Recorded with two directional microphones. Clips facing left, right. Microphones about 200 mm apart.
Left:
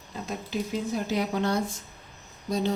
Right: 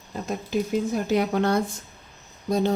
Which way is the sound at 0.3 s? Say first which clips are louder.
Right 6 dB; 50° right (ahead or behind).